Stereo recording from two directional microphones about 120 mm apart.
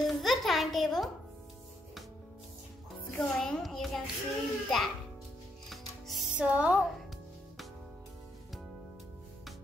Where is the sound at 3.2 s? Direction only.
5° left (ahead or behind).